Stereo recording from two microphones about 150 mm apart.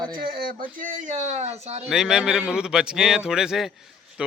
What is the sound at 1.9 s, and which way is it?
Speech, 5° right (ahead or behind).